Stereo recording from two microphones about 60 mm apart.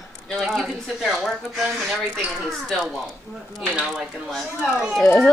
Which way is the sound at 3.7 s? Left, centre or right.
Centre.